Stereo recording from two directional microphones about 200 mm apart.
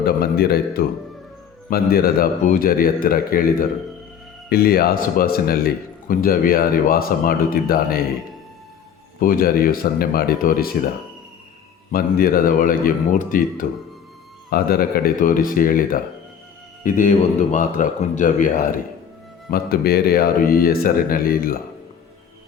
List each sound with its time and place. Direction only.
0.0 s a man's voice: 50° left (ahead or behind)
9.2 s a man's voice: 45° left (ahead or behind)
11.9 s a man's voice: 45° left (ahead or behind)